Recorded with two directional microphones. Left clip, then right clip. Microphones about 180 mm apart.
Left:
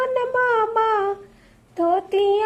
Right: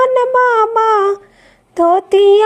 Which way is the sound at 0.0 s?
40° right (ahead or behind).